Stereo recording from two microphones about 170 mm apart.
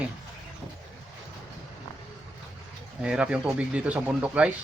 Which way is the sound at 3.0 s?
5° right (ahead or behind).